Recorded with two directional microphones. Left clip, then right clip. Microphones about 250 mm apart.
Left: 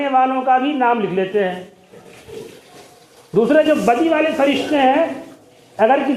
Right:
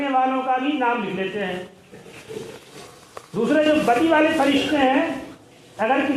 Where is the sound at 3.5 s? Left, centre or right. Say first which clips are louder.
Left 2 dB; left.